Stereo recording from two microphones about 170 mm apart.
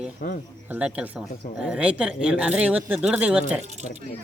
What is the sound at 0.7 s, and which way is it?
Speech, 5° right (ahead or behind).